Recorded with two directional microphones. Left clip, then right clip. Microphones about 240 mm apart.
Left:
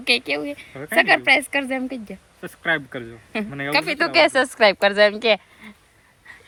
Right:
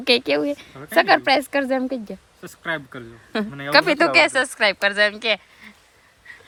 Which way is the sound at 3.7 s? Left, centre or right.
Right.